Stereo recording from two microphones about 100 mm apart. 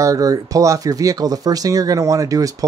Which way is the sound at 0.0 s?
35° right (ahead or behind).